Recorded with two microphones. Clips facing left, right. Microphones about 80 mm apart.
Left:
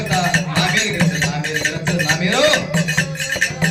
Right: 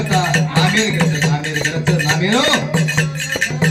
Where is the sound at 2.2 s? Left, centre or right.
Right.